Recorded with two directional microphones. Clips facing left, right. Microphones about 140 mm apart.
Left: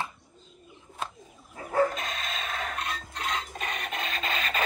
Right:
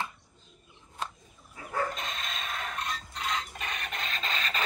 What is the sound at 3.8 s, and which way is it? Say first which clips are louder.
Rub: left 3 dB; centre (ahead or behind).